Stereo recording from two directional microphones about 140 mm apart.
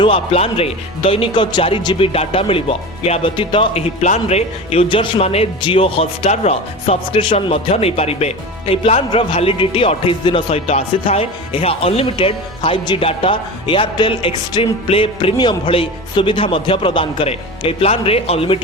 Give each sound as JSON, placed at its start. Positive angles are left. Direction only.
{"t": 0.0, "sound": "speech", "side_deg": 40}
{"t": 4.0, "sound": "speech", "side_deg": 50}